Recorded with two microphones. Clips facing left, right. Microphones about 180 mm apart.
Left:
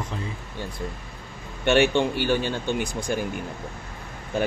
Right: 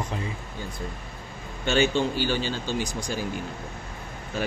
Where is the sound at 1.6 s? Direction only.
65° left (ahead or behind).